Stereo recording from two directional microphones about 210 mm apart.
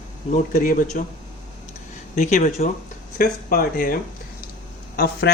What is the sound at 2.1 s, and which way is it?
Speech, 35° left (ahead or behind).